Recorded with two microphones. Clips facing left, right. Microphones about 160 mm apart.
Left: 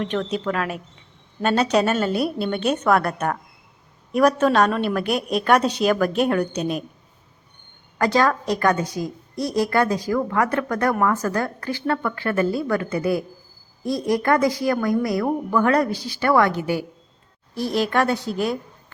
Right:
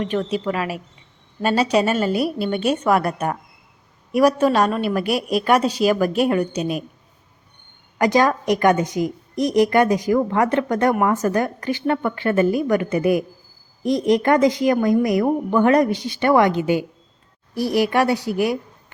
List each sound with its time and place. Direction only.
0.0 s a woman's voice: 5° right (ahead or behind)
7.9 s a woman's voice: 15° right (ahead or behind)